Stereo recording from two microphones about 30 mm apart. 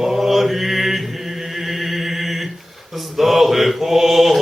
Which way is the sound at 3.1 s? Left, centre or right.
Centre.